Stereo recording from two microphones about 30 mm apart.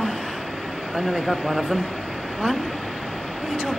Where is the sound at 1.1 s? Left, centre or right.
Centre.